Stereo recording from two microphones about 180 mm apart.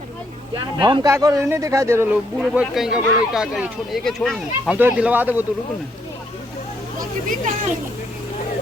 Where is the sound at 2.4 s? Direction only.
5° right (ahead or behind).